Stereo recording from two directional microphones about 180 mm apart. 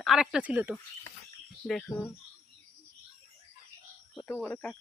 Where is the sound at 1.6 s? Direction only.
Centre (ahead or behind).